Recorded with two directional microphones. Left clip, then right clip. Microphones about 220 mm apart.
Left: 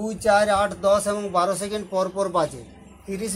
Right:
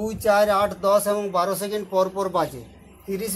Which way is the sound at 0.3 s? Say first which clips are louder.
Even; 20° right (ahead or behind).